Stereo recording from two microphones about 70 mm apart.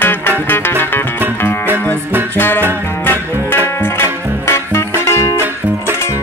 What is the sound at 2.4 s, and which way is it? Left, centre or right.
Music, left.